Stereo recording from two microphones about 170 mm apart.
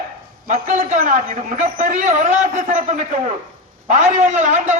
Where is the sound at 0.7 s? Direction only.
50° right (ahead or behind).